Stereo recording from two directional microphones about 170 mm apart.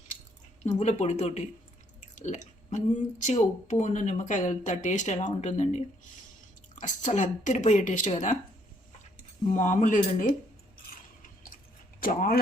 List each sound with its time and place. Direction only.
0.6 s speech: 40° left (ahead or behind)
2.1 s chewing: 45° left (ahead or behind)
3.2 s speech: 45° left (ahead or behind)
9.1 s speech: 45° left (ahead or behind)
11.9 s speech: 55° left (ahead or behind)